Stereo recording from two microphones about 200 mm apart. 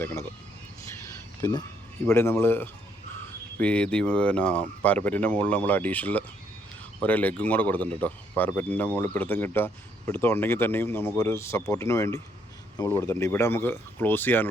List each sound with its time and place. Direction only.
0.0 s speech: 10° left (ahead or behind)
1.4 s speech: 20° left (ahead or behind)